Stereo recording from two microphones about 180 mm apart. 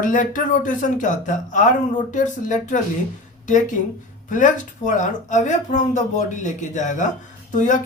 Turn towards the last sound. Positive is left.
turn(degrees=45)  # may be behind; listen again after turning